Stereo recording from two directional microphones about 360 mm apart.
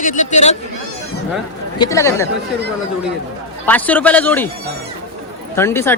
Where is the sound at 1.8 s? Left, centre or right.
Centre.